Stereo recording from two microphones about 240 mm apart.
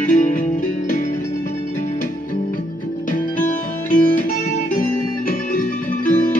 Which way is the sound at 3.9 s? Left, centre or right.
Left.